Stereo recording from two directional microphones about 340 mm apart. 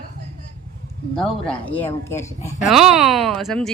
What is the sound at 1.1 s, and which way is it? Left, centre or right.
A woman's voice, centre.